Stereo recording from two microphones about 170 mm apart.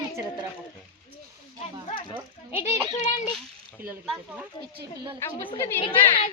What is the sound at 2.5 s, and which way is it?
Speech, 40° left (ahead or behind).